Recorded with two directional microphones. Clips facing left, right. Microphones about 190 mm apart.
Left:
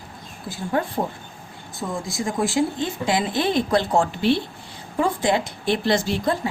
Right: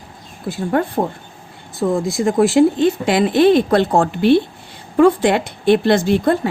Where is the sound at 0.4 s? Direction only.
60° right (ahead or behind).